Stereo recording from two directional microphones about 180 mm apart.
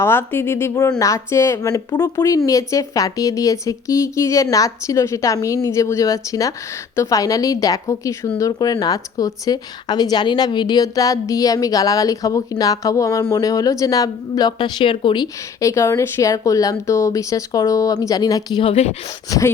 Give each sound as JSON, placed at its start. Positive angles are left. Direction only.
{"t": 0.0, "sound": "a woman's voice", "side_deg": 15}
{"t": 19.3, "sound": "a woman's voice", "side_deg": 20}